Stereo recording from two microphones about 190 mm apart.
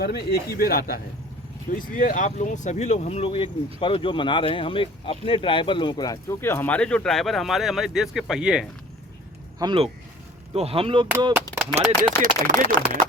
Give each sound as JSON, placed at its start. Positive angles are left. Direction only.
{"t": 0.0, "sound": "speech", "side_deg": 55}
{"t": 9.6, "sound": "speech", "side_deg": -25}
{"t": 11.5, "sound": "a sound", "side_deg": -10}
{"t": 12.2, "sound": "speech", "side_deg": -45}